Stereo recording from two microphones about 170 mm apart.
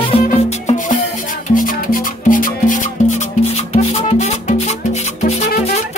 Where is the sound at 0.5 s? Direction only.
45° left (ahead or behind).